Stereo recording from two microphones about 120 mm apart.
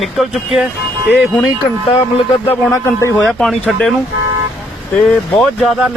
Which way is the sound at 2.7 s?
25° left (ahead or behind).